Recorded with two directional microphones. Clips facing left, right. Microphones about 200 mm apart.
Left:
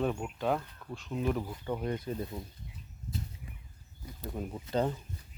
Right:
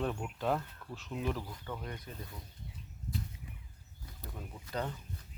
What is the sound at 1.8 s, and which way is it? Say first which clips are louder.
Speech: left 10 dB; 30° left (ahead or behind).